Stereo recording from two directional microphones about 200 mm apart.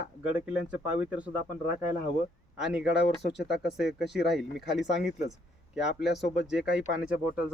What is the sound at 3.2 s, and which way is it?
Speech, 55° left (ahead or behind).